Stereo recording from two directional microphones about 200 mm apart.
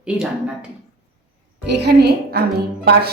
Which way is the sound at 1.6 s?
55° right (ahead or behind).